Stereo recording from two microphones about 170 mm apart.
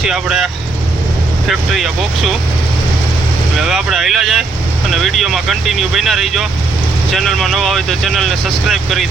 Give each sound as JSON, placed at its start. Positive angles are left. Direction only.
{"t": 0.0, "sound": "speech", "side_deg": -5}
{"t": 3.6, "sound": "speech", "side_deg": 0}